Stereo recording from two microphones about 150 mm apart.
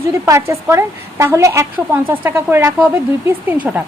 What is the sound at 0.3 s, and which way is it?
A woman's voice, 20° right (ahead or behind).